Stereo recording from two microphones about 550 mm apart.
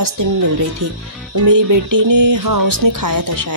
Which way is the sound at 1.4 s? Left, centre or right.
Right.